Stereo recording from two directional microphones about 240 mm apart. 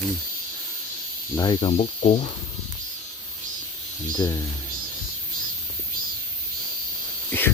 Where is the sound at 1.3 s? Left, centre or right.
Centre.